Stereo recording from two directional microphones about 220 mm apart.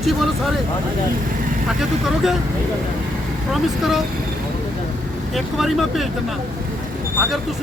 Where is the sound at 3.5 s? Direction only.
Centre (ahead or behind).